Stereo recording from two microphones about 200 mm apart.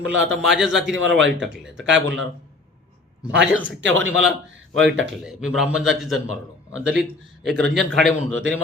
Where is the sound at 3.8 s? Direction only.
70° right (ahead or behind).